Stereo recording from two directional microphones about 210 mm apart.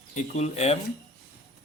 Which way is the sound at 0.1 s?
30° left (ahead or behind).